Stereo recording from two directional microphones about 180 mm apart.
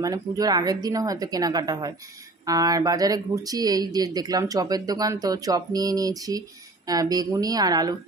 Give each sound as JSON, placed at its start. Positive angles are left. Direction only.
{"t": 0.0, "sound": "speech", "side_deg": -20}